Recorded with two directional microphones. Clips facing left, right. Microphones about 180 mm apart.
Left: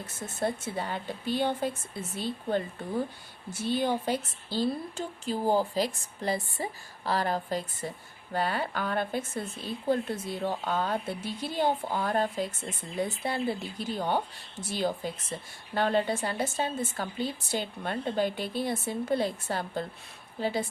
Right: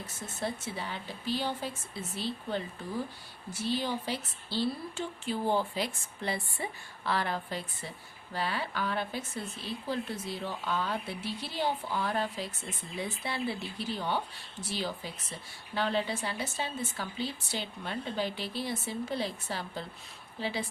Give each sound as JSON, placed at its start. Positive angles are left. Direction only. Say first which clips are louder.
{"t": 0.3, "sound": "speech", "louder": "left 5 dB", "side_deg": 50}